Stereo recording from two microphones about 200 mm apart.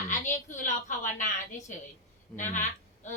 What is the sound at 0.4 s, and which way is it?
A child's voice, 40° left (ahead or behind).